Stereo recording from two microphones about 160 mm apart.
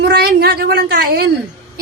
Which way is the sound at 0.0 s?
80° right.